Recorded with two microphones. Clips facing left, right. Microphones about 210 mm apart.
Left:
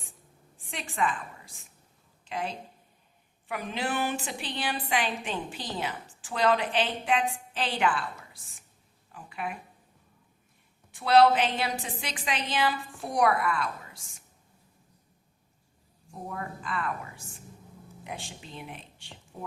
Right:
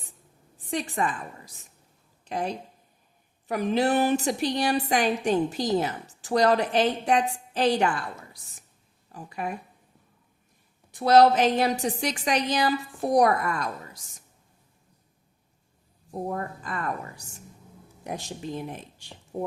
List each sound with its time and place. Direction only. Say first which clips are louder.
0.6 s a woman's voice: right 3 dB; 40° right (ahead or behind)
10.9 s a woman's voice: right 3 dB; 40° right (ahead or behind)
16.1 s a woman's voice: right 7 dB; 40° right (ahead or behind)